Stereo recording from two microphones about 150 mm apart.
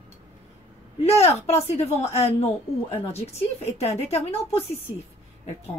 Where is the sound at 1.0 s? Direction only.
45° left (ahead or behind).